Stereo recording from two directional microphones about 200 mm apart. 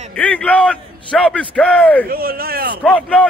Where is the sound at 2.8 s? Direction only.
5° left (ahead or behind).